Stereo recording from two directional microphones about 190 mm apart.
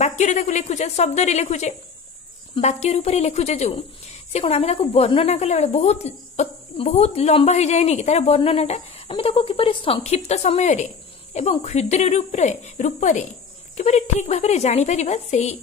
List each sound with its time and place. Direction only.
0.0 s speech: 40° left (ahead or behind)